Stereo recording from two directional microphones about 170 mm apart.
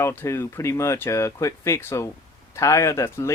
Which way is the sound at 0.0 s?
15° left (ahead or behind).